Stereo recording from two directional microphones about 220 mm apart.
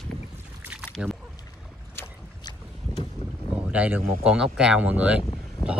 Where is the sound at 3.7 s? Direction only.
5° right (ahead or behind).